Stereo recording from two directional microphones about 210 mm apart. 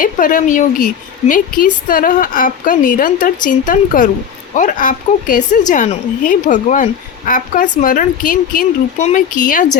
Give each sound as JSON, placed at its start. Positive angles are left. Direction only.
{"t": 0.0, "sound": "a woman's voice", "side_deg": 40}